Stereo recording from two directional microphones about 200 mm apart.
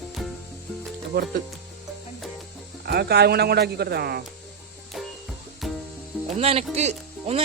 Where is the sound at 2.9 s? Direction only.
55° right (ahead or behind).